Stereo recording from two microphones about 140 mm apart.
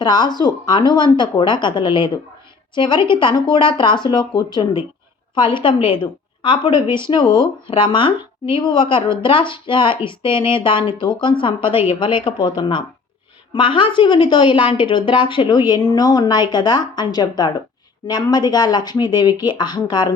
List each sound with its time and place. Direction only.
0.0 s a woman's voice: 30° left (ahead or behind)